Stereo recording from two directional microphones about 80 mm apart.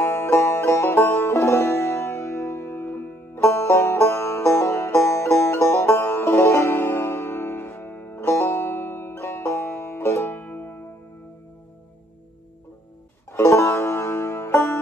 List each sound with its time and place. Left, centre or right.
0.0 s music: left
13.3 s music: left